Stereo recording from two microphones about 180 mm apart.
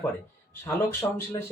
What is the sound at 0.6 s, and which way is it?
Speech, 15° left (ahead or behind).